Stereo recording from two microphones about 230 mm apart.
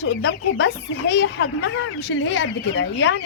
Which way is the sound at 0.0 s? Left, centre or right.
Left.